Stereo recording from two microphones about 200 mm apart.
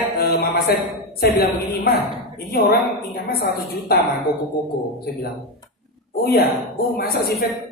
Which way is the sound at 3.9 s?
50° left (ahead or behind).